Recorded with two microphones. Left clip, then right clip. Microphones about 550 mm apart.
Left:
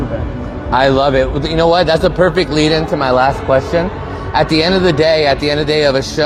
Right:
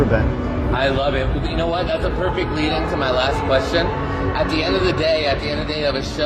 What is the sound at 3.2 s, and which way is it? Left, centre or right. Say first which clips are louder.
Speech: left 6 dB; left.